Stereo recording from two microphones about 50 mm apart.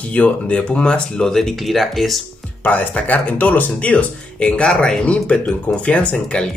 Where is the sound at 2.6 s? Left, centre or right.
Left.